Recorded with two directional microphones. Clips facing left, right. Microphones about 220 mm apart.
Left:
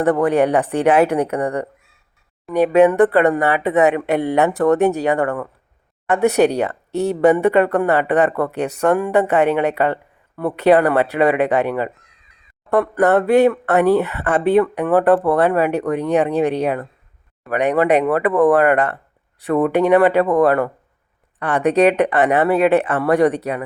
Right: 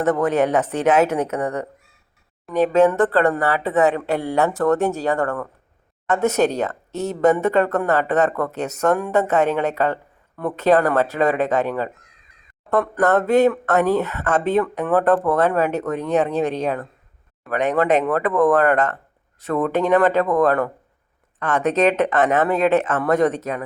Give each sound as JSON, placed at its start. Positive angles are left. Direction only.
{"t": 0.0, "sound": "speech", "side_deg": 10}